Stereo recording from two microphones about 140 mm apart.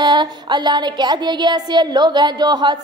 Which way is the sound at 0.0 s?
30° right (ahead or behind).